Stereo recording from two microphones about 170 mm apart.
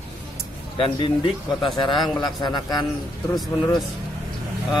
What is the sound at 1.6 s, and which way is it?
A man's voice, 30° left (ahead or behind).